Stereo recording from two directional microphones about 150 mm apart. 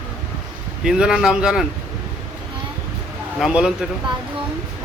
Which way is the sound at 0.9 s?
5° right (ahead or behind).